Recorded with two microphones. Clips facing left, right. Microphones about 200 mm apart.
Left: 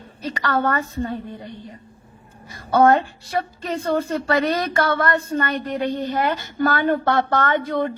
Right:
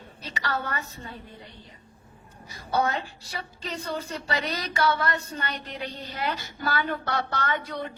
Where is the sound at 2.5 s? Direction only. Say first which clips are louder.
Left 11 dB; 50° left (ahead or behind).